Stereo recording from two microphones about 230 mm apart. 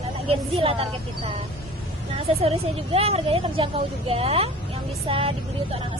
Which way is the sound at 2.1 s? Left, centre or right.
Right.